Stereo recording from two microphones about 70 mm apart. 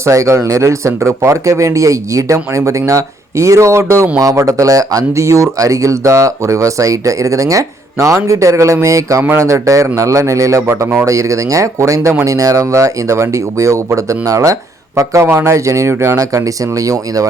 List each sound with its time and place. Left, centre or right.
0.0 s speech: right
4.2 s speech: right